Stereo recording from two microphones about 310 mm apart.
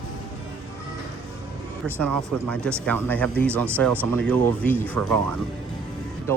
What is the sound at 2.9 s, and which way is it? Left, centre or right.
Speech, centre.